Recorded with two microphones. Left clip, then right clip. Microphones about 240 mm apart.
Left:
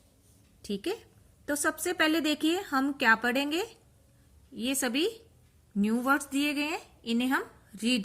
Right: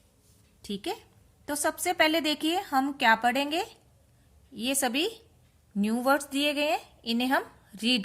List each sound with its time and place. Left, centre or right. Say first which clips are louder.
0.7 s a woman's voice: left 1 dB; right